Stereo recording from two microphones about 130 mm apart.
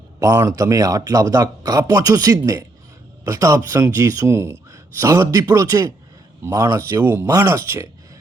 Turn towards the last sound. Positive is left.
turn(degrees=-20)  # may be behind; listen again after turning